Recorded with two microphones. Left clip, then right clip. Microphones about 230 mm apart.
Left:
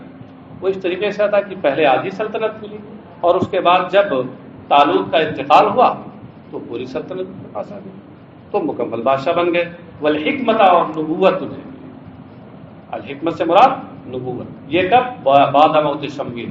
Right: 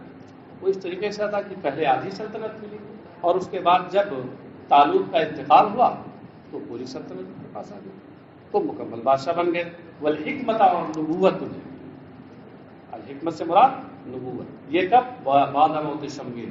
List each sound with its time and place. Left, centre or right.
0.6 s a man's voice: left
6.9 s a man's voice: left
12.9 s a man's voice: left